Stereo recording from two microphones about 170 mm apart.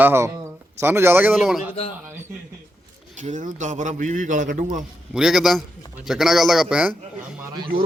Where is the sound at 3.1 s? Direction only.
45° right (ahead or behind).